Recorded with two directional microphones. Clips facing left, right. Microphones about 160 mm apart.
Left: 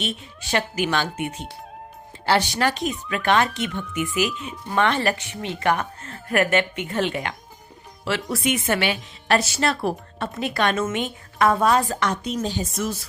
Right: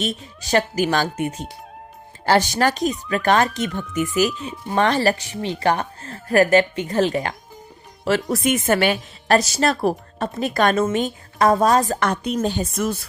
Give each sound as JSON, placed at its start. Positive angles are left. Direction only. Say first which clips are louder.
{"t": 0.0, "sound": "speech", "louder": "right 4 dB", "side_deg": -40}